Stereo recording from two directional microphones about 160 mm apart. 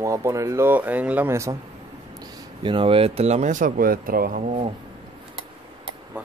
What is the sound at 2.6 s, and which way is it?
Speech, 35° right (ahead or behind).